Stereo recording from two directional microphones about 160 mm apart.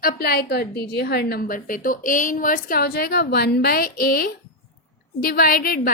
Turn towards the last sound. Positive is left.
turn(degrees=65)  # may be behind; listen again after turning